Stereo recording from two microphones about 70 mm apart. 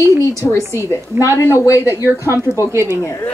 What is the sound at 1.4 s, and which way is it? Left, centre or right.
Speech, left.